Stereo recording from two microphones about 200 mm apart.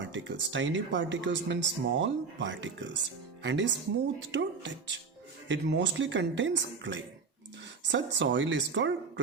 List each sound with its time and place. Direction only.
0.0 s speech: 65° right (ahead or behind)